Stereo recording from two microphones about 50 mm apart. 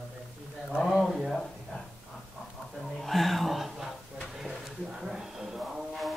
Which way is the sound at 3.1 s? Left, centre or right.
Centre.